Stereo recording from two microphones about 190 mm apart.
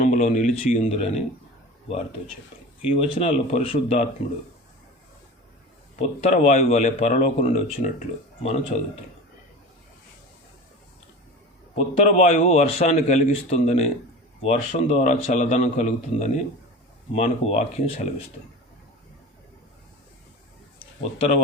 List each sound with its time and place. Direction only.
0.0 s a man's voice: 40° left (ahead or behind)
3.0 s a man's voice: 35° left (ahead or behind)
6.0 s a man's voice: 35° left (ahead or behind)
11.7 s a man's voice: 40° left (ahead or behind)